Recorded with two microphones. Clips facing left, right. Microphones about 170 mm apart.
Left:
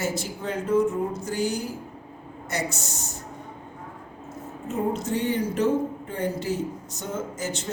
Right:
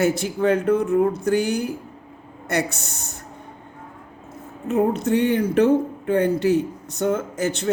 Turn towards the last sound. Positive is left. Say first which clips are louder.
# right 9 dB
turn(degrees=-65)  # may be behind; listen again after turning